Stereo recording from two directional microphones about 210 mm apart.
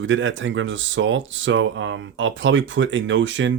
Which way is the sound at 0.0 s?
65° right (ahead or behind).